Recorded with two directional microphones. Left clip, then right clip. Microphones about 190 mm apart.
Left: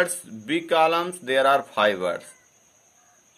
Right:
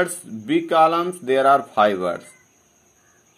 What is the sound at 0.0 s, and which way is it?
Speech, 30° left (ahead or behind).